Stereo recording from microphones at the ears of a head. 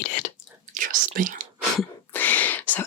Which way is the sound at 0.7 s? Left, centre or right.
Right.